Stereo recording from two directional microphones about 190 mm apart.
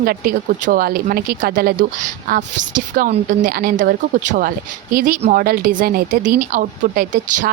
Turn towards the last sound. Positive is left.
turn(degrees=-45)  # may be behind; listen again after turning